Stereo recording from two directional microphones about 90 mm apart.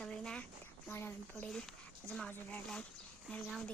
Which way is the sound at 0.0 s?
10° left (ahead or behind).